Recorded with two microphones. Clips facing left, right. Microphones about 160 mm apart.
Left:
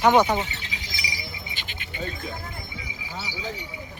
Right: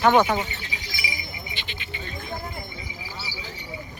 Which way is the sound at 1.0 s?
40° left (ahead or behind).